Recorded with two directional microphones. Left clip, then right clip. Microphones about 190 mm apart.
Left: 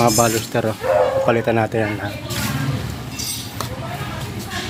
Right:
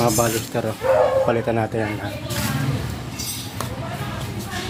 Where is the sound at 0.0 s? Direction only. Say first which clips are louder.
Left 4 dB; 35° left (ahead or behind).